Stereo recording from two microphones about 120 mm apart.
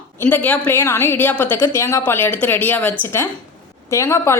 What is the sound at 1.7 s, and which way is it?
A woman's voice, 25° left (ahead or behind).